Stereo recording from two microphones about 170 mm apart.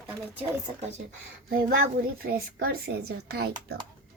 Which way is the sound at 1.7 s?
60° right (ahead or behind).